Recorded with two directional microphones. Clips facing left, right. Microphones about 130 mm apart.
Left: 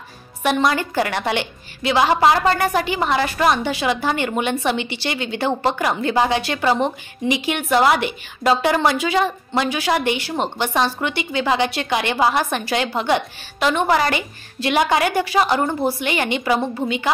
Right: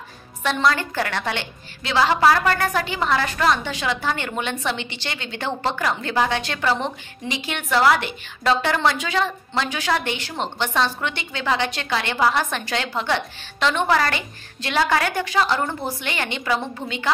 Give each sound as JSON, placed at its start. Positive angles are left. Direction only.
{"t": 0.4, "sound": "a woman's voice", "side_deg": 15}